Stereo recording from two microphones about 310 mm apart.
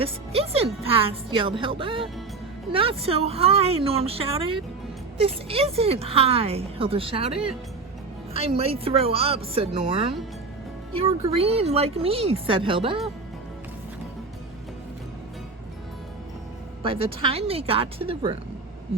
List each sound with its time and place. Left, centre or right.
0.0 s a woman's voice: centre
8.3 s speech: centre
16.8 s speech: centre